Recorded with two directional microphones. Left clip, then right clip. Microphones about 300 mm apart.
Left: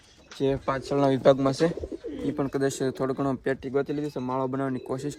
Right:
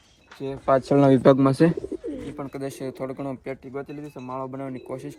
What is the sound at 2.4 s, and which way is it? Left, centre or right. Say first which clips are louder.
Speech: left 6 dB; left.